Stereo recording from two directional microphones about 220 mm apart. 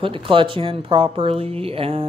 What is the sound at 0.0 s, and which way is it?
Speech, 25° right (ahead or behind).